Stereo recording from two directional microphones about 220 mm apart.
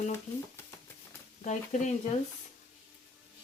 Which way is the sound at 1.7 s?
30° left (ahead or behind).